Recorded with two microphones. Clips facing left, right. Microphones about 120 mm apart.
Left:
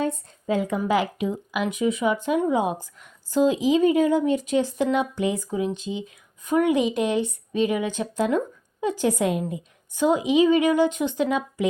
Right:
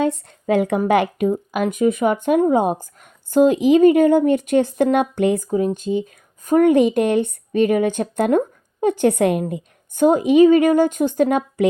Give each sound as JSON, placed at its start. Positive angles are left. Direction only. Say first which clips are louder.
{"t": 0.0, "sound": "a woman's voice", "louder": "right 6 dB", "side_deg": -75}
{"t": 5.5, "sound": "speech", "louder": "right 7 dB", "side_deg": -45}